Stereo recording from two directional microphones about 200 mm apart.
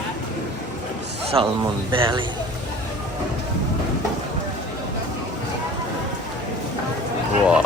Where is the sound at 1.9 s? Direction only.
25° right (ahead or behind).